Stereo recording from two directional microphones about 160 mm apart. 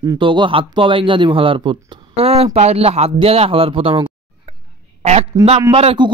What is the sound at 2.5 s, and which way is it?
A man's voice, 40° right (ahead or behind).